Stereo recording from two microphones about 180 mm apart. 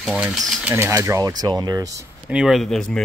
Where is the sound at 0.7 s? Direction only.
15° right (ahead or behind).